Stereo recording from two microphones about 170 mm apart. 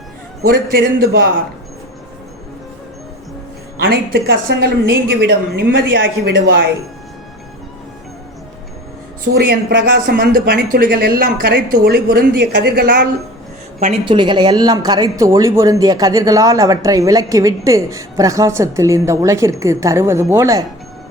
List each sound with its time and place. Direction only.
0.4 s a woman's voice: 60° right (ahead or behind)
3.8 s a woman's voice: 65° right (ahead or behind); by 6.4 s 85° right
9.2 s a woman's voice: 65° right (ahead or behind)
13.7 s speech: 40° right (ahead or behind); by 20.7 s 20° right (ahead or behind)